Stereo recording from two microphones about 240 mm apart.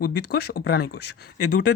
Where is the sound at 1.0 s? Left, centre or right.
Left.